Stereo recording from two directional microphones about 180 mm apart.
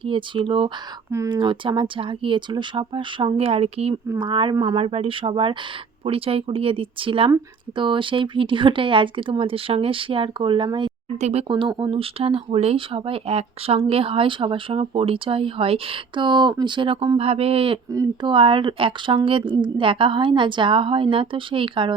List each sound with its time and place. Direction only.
0.0 s speech: 30° right (ahead or behind)
17.9 s speech: 20° right (ahead or behind)